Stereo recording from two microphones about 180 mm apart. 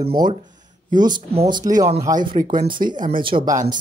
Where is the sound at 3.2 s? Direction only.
30° right (ahead or behind).